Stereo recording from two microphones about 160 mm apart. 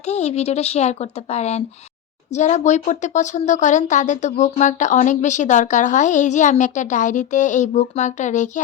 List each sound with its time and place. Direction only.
0.0 s speech: 40° left (ahead or behind)